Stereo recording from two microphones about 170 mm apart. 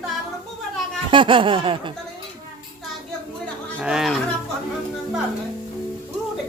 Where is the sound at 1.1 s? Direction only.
30° right (ahead or behind).